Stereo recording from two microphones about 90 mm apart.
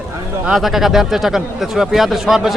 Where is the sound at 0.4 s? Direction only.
5° right (ahead or behind).